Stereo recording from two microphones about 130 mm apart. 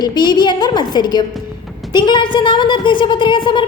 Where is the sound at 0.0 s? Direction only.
30° left (ahead or behind).